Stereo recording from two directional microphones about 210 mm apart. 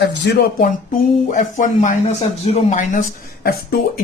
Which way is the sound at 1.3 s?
35° left (ahead or behind).